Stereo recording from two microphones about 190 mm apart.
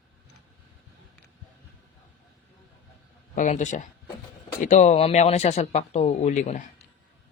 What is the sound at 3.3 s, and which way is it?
Speech, 40° left (ahead or behind).